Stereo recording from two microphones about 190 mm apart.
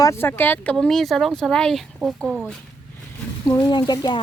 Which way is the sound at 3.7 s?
25° left (ahead or behind).